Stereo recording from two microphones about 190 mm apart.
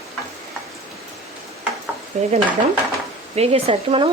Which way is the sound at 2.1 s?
40° right (ahead or behind).